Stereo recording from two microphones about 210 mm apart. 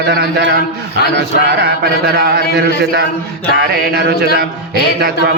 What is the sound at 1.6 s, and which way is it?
A man's voice, 50° right (ahead or behind).